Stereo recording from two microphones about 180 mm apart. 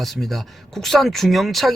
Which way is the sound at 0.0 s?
Centre (ahead or behind).